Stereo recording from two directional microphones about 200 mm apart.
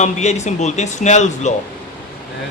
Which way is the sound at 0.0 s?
35° left (ahead or behind).